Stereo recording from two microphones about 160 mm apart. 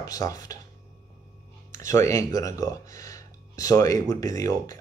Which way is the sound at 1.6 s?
20° left (ahead or behind).